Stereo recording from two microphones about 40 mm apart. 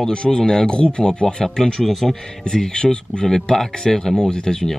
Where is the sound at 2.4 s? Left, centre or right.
Centre.